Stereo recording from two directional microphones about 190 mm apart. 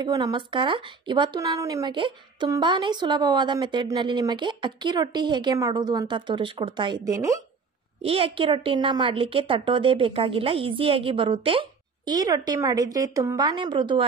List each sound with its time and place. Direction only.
0.0 s speech: 20° right (ahead or behind)
8.0 s speech: 30° right (ahead or behind)